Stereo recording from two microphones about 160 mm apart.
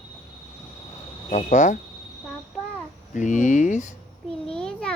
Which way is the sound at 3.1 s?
50° left (ahead or behind).